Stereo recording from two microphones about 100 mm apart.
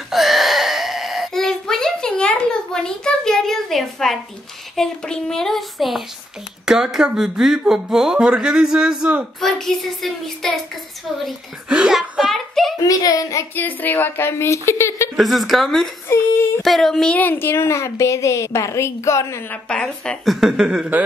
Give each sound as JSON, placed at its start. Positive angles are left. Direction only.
{"t": 0.1, "sound": "a sound", "side_deg": 0}
{"t": 4.7, "sound": "speech", "side_deg": 5}
{"t": 9.4, "sound": "speech", "side_deg": 5}
{"t": 11.1, "sound": "a sound", "side_deg": -5}
{"t": 12.8, "sound": "speech", "side_deg": 35}
{"t": 13.6, "sound": "a woman's voice", "side_deg": 20}
{"t": 15.1, "sound": "speech", "side_deg": 0}
{"t": 16.1, "sound": "female singing", "side_deg": 25}
{"t": 16.6, "sound": "speech", "side_deg": 5}
{"t": 17.2, "sound": "a woman's voice", "side_deg": 20}
{"t": 19.5, "sound": "speech", "side_deg": 10}
{"t": 20.3, "sound": "speech", "side_deg": -5}